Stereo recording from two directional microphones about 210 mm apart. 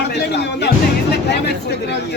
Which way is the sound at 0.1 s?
55° left (ahead or behind).